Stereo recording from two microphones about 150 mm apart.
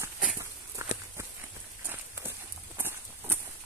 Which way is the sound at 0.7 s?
20° right (ahead or behind).